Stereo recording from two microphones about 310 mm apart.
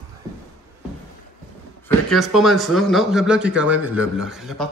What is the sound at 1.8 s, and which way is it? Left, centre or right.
Speech, centre.